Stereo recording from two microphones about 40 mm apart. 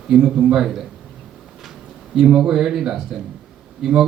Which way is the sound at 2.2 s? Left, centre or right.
Right.